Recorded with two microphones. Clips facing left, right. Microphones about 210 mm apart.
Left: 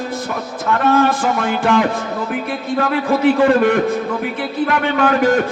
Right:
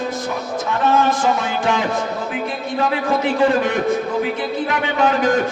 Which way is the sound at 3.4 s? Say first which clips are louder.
Left 3 dB; 60° left (ahead or behind).